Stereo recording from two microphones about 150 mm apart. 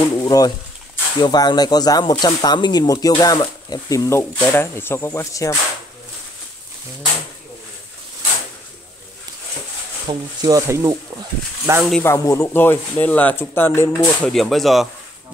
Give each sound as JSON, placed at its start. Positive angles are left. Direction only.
{"t": 0.0, "sound": "speech", "side_deg": 25}
{"t": 10.0, "sound": "speech", "side_deg": -25}
{"t": 12.0, "sound": "speech", "side_deg": 20}
{"t": 14.2, "sound": "speech", "side_deg": 0}